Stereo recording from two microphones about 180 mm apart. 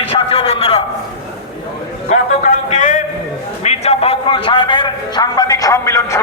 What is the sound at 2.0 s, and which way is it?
A man's voice, 40° left (ahead or behind).